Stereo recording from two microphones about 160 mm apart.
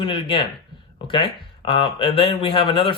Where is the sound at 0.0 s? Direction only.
30° left (ahead or behind).